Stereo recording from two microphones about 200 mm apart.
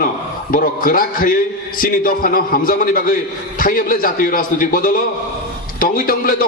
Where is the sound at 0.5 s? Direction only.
45° left (ahead or behind).